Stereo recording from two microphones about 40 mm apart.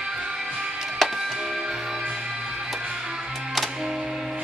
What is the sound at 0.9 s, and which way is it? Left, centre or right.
Music, centre.